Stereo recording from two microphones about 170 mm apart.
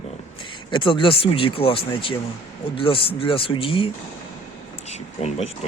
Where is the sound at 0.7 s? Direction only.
30° left (ahead or behind).